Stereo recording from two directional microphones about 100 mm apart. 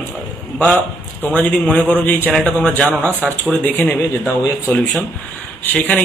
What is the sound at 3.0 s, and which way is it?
Speech, 20° right (ahead or behind).